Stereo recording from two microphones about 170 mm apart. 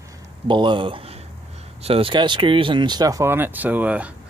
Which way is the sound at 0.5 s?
30° right (ahead or behind).